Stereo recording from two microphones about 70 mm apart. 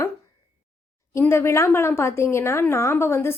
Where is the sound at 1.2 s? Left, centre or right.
Left.